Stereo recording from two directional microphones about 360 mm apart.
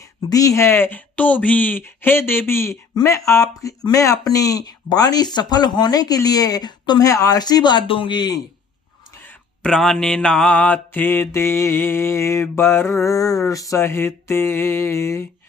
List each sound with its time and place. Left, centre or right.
0.3 s speech: centre